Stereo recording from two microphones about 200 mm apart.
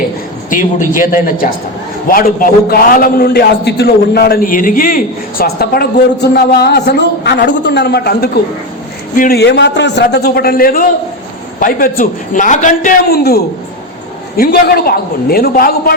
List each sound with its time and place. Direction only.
0.5 s a man's voice: 40° left (ahead or behind)